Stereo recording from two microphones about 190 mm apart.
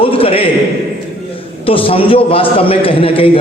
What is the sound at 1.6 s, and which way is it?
A man's voice, 30° left (ahead or behind).